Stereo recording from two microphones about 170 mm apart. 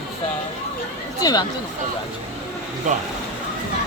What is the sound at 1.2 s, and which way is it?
Speech, 20° left (ahead or behind).